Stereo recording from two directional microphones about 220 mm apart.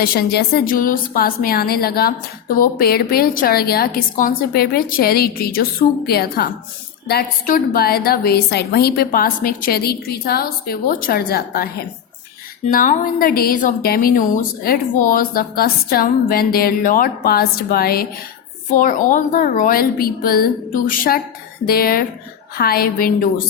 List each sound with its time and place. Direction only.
0.0 s a woman's voice: 45° left (ahead or behind)
12.7 s a woman's voice: 40° left (ahead or behind)